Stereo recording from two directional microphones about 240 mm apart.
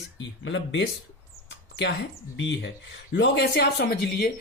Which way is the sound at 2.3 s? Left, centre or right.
Left.